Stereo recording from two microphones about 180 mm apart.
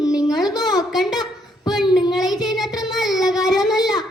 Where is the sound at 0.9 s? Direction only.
Centre (ahead or behind).